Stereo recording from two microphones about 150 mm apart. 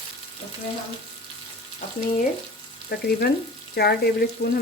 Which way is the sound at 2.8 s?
90° left.